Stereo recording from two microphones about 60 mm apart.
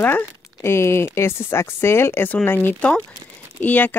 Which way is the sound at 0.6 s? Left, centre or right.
Left.